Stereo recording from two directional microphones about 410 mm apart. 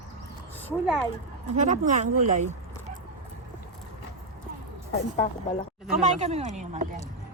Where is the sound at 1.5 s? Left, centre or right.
Centre.